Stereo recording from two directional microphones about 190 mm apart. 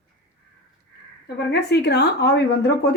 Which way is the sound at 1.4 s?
60° left (ahead or behind).